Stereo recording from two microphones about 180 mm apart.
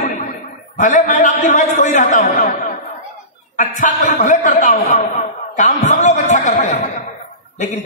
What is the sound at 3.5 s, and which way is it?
A man's voice, 45° left (ahead or behind).